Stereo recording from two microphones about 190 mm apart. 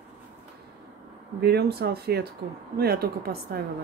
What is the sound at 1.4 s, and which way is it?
Speech, 60° right (ahead or behind).